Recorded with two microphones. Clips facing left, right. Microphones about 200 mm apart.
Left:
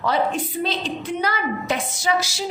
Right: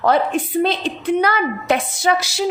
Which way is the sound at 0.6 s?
60° right (ahead or behind).